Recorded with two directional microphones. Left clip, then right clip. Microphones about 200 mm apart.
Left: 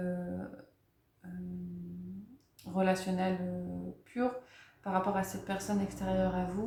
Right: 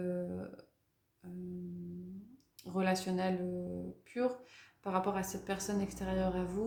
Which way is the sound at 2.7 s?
45° right (ahead or behind).